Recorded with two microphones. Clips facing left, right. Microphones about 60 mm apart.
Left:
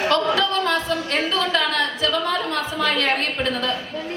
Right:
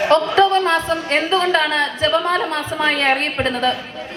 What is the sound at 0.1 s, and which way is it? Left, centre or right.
A woman's voice, right.